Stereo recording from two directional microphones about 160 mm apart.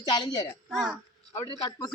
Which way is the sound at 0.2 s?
25° left (ahead or behind).